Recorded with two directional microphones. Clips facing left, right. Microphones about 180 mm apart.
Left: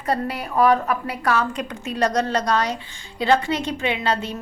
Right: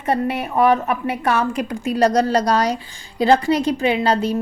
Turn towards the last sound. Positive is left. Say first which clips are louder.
# right 6 dB
turn(degrees=-35)  # may be behind; listen again after turning